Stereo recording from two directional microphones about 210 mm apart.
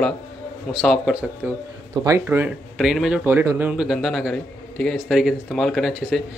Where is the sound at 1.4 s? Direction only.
10° right (ahead or behind).